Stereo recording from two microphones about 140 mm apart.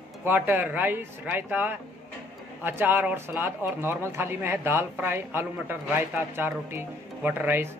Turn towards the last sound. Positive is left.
turn(degrees=-15)  # may be behind; listen again after turning